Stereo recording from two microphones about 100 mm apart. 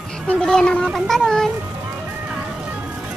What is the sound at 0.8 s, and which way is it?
Cat, centre (ahead or behind).